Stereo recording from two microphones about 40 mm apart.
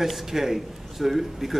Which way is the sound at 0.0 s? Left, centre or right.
Centre.